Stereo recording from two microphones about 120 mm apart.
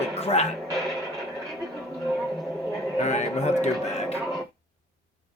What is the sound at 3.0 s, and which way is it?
A man's voice, 70° left (ahead or behind).